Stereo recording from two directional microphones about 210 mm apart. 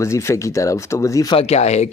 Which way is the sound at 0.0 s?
15° left (ahead or behind).